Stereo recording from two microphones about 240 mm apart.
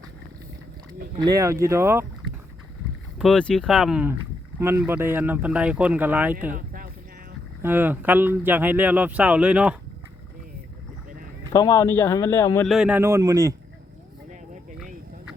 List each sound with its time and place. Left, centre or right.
1.1 s speech: centre
3.2 s speech: centre
6.5 s a sound: right
7.6 s speech: centre
11.5 s speech: centre
12.7 s speech: centre